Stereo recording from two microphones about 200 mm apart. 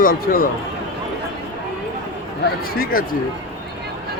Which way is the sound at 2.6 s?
45° left (ahead or behind).